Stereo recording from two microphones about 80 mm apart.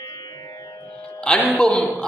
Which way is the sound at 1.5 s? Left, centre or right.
Centre.